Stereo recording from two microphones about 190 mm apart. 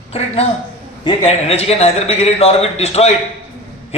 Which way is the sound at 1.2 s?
35° left (ahead or behind).